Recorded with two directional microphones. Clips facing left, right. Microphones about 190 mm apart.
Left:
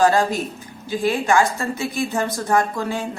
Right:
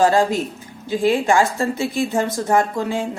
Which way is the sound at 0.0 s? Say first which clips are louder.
Right 1 dB; 25° right (ahead or behind).